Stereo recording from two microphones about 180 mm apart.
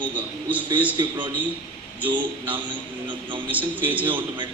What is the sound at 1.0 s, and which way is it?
Speech, 25° right (ahead or behind).